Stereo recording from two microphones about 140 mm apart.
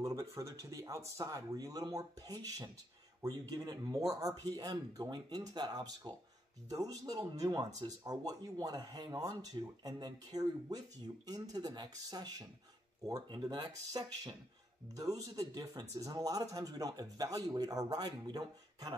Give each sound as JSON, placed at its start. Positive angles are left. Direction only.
{"t": 0.0, "sound": "speech", "side_deg": -25}